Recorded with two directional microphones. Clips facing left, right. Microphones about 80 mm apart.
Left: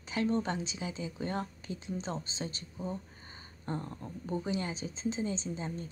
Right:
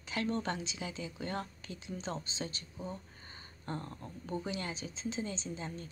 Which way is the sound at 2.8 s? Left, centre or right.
Left.